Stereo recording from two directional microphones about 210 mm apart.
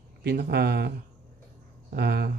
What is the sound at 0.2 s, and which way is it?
Speech, 50° right (ahead or behind).